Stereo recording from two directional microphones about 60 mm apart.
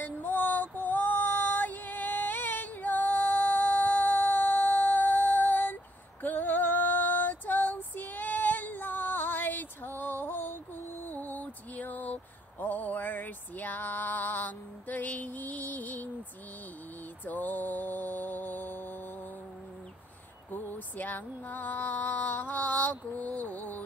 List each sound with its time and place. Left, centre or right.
0.0 s female singing: left
17.2 s music: left
20.5 s a sound: left